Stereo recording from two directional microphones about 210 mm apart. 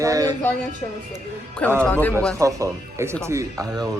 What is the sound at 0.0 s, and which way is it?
Speech, 15° right (ahead or behind).